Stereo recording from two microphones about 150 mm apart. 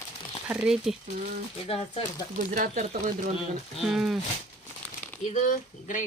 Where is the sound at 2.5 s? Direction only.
55° right (ahead or behind).